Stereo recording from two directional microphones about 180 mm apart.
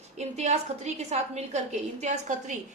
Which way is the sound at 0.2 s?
40° right (ahead or behind).